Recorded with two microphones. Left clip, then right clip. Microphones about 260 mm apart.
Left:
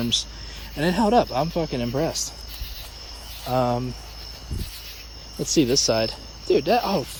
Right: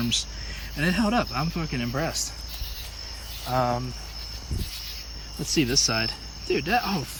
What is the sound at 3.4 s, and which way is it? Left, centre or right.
Speech, right.